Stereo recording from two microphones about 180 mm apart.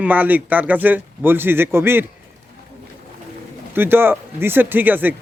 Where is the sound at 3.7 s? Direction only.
10° right (ahead or behind).